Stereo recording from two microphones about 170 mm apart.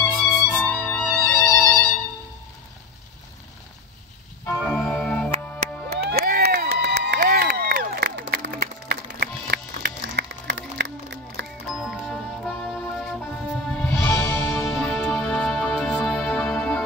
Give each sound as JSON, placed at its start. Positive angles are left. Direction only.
{"t": 0.0, "sound": "music", "side_deg": 10}
{"t": 4.5, "sound": "organ", "side_deg": 5}
{"t": 5.9, "sound": "a sound", "side_deg": -65}
{"t": 11.4, "sound": "music", "side_deg": -90}
{"t": 11.7, "sound": "music", "side_deg": 0}
{"t": 14.2, "sound": "music", "side_deg": 15}
{"t": 14.8, "sound": "music", "side_deg": 5}